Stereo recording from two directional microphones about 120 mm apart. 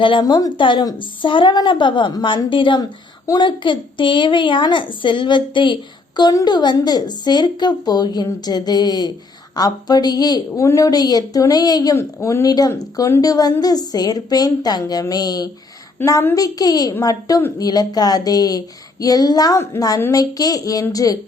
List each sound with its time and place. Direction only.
0.0 s a woman's voice: 40° left (ahead or behind)